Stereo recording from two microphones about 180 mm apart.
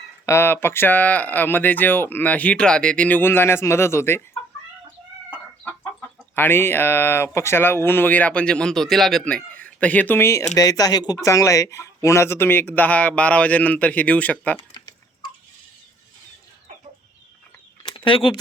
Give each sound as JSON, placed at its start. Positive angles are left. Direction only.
{"t": 0.3, "sound": "speech", "side_deg": 15}
{"t": 5.3, "sound": "chicken", "side_deg": 10}
{"t": 6.3, "sound": "speech", "side_deg": 10}
{"t": 14.7, "sound": "chicken", "side_deg": 25}
{"t": 17.9, "sound": "speech", "side_deg": 30}